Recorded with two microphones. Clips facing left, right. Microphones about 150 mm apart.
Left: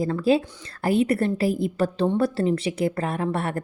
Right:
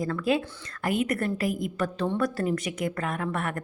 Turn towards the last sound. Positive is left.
turn(degrees=30)  # may be behind; listen again after turning